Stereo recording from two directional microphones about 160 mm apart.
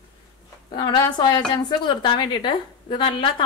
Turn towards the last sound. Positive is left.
turn(degrees=30)  # may be behind; listen again after turning